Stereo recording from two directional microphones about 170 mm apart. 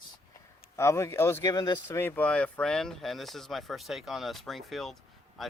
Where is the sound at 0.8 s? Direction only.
15° left (ahead or behind).